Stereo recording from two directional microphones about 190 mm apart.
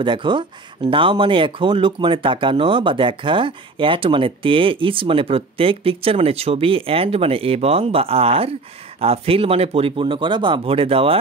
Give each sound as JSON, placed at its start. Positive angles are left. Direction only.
{"t": 0.0, "sound": "speech", "side_deg": -25}